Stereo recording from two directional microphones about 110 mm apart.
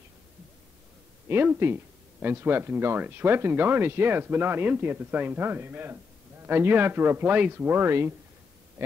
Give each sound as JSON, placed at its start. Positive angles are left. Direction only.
{"t": 1.3, "sound": "speech", "side_deg": -20}